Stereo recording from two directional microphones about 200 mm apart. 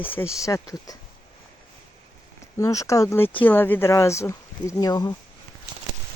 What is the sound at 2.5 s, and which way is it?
Speech, 15° left (ahead or behind).